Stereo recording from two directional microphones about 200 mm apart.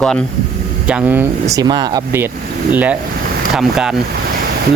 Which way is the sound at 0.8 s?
5° right (ahead or behind).